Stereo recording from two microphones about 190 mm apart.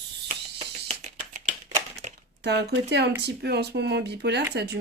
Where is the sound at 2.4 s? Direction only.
60° right (ahead or behind).